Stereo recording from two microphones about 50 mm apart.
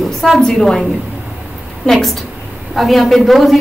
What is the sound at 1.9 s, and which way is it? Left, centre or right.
A woman's voice, centre.